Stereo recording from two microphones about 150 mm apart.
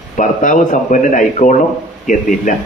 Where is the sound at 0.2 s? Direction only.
55° left (ahead or behind).